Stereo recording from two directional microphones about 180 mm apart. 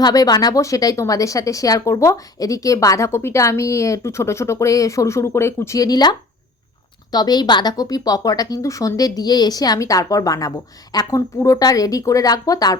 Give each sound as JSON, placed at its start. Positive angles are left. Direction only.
{"t": 0.0, "sound": "a woman's voice", "side_deg": 20}